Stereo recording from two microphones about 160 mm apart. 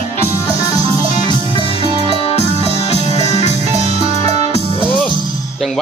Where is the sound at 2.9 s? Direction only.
40° right (ahead or behind).